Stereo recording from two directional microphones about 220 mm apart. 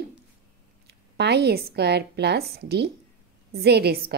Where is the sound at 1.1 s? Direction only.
50° right (ahead or behind).